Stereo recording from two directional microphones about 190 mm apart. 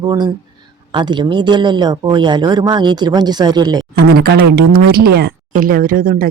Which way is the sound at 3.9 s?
55° right (ahead or behind).